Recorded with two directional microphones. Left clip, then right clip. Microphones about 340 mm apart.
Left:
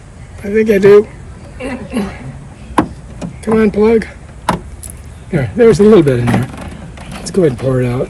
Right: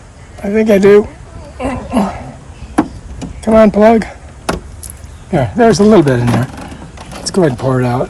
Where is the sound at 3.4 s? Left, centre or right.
Centre.